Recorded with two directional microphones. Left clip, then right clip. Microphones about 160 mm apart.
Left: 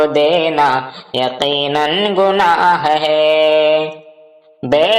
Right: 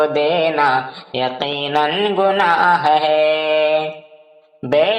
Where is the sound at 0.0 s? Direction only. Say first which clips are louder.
Left 3 dB; 40° left (ahead or behind).